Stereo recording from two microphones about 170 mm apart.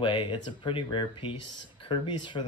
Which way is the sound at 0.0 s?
30° left (ahead or behind).